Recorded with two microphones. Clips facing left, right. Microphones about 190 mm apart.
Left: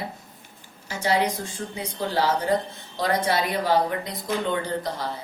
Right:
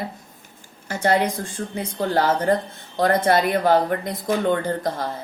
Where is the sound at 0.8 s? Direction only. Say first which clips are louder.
Right 3 dB; 55° right (ahead or behind).